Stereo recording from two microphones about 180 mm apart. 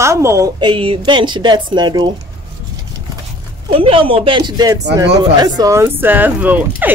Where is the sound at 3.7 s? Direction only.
30° right (ahead or behind); by 6.9 s 10° right (ahead or behind).